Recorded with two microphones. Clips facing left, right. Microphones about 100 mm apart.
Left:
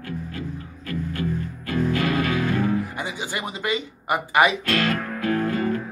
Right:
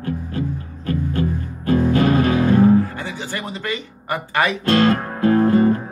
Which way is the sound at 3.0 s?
15° left (ahead or behind).